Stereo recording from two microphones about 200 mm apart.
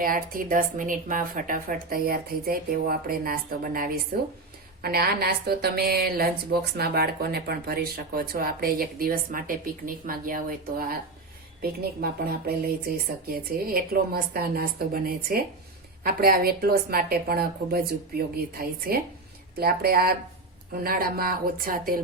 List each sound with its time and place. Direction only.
0.0 s a woman's voice: 45° right (ahead or behind)